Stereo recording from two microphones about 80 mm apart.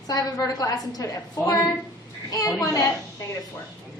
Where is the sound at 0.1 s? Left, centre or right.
Left.